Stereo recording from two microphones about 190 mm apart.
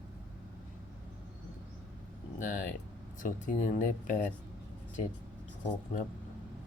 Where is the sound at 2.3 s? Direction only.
45° left (ahead or behind).